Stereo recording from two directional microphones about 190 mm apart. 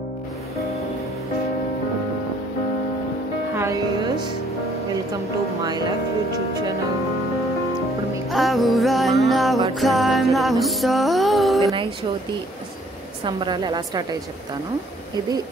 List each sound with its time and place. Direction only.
3.5 s speech: 15° right (ahead or behind)
5.6 s a woman's voice: 20° right (ahead or behind)
8.3 s music: centre (ahead or behind)
13.2 s a woman's voice: 25° right (ahead or behind)